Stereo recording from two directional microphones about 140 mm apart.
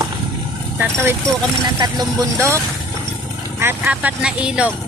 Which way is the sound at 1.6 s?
30° right (ahead or behind).